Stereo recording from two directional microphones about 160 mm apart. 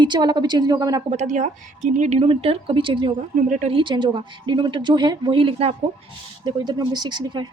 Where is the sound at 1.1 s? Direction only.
50° right (ahead or behind); by 3.1 s 30° right (ahead or behind).